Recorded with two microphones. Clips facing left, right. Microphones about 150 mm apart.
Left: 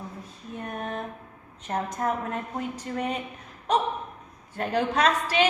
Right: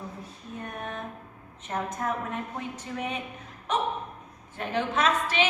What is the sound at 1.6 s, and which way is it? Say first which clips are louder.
A woman's voice: left 3 dB; 35° left (ahead or behind).